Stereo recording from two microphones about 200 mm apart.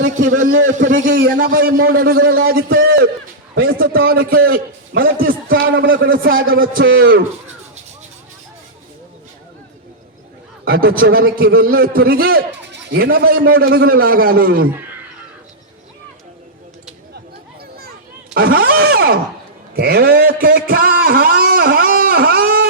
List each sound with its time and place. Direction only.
0.0 s a man's voice: 40° right (ahead or behind)
10.7 s a man's voice: 45° right (ahead or behind)
18.3 s a man's voice: 50° right (ahead or behind)
20.7 s a sound: 45° right (ahead or behind)